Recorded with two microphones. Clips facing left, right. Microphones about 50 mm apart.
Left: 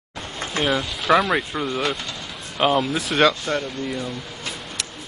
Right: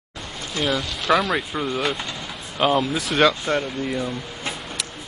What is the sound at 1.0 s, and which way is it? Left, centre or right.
Speech, centre.